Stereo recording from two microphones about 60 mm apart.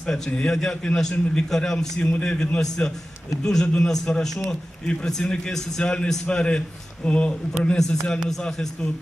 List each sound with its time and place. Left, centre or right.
0.1 s a man's voice: centre
2.0 s a man's voice: left